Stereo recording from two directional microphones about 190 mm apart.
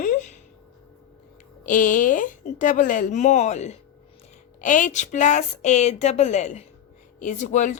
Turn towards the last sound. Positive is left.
turn(degrees=40)  # may be behind; listen again after turning